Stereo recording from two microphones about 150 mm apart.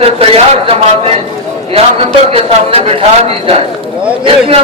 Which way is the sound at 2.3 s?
40° right (ahead or behind).